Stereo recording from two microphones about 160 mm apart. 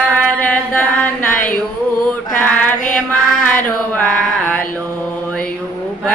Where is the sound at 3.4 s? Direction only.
10° left (ahead or behind).